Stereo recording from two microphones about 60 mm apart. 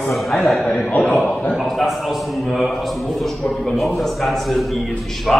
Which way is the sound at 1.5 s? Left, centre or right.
Centre.